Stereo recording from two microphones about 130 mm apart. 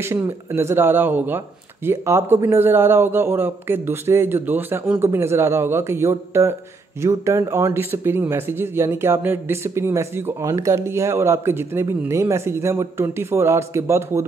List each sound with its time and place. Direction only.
0.0 s speech: 20° right (ahead or behind)